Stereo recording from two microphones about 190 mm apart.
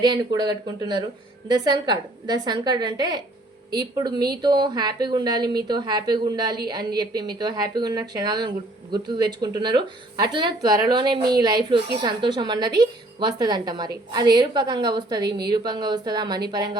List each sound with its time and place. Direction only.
0.0 s speech: 20° right (ahead or behind)
15.2 s a woman's voice: 60° right (ahead or behind)
15.4 s speech: 20° right (ahead or behind)